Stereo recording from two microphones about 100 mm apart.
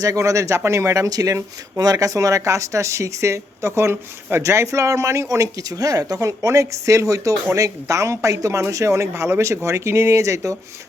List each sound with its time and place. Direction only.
0.0 s speech: 35° right (ahead or behind)